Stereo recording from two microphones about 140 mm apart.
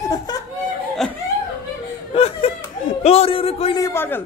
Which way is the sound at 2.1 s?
45° left (ahead or behind).